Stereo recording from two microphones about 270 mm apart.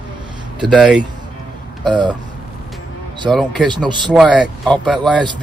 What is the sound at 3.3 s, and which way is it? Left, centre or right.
Speech, centre.